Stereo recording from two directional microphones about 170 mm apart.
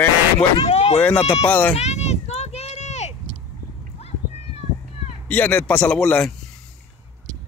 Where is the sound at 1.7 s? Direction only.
40° left (ahead or behind).